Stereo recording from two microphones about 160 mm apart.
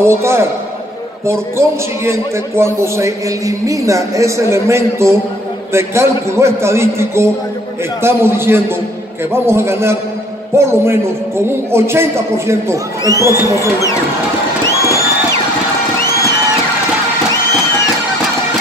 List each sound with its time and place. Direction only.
0.0 s a sound: 15° right (ahead or behind)
1.2 s a man's voice: 15° right (ahead or behind)
13.6 s speech: 20° left (ahead or behind)